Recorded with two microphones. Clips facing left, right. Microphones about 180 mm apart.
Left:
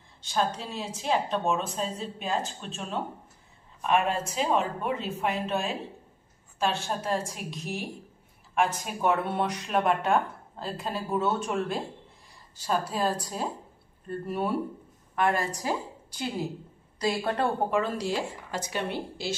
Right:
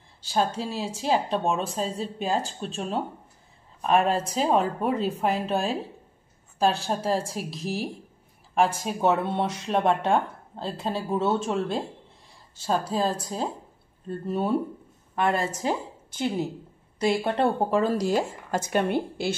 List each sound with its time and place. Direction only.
0.2 s a woman's voice: 35° right (ahead or behind); by 19.3 s 55° right (ahead or behind)